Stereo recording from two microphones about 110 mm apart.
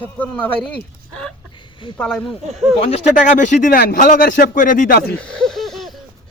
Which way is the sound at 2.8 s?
75° left (ahead or behind).